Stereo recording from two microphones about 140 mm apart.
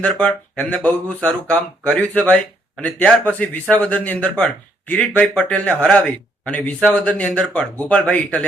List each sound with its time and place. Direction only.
0.0 s speech: 10° left (ahead or behind)